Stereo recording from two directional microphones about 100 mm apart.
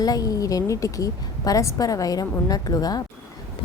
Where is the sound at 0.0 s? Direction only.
40° left (ahead or behind).